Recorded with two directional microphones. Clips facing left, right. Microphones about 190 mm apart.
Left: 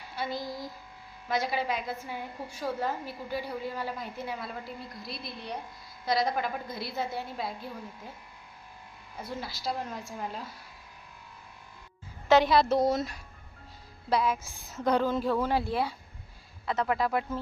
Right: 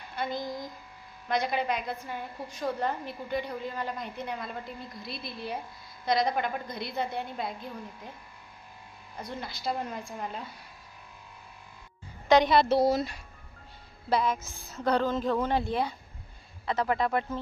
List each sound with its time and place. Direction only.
0.2 s a woman's voice: 5° left (ahead or behind)
0.4 s speech: 20° right (ahead or behind)
1.3 s a woman's voice: 5° left (ahead or behind)
9.1 s a woman's voice: 5° left (ahead or behind)
12.3 s a woman's voice: centre (ahead or behind)
14.8 s a woman's voice: 10° left (ahead or behind)